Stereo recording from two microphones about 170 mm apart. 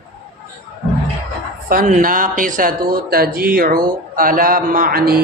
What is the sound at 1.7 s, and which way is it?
Speech, 55° right (ahead or behind).